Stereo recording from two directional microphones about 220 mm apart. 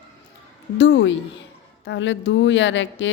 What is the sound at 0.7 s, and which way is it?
A woman's voice, 55° left (ahead or behind).